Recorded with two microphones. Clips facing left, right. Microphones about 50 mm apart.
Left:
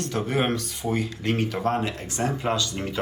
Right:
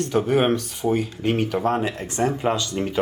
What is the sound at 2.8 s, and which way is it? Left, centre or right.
Speech, centre.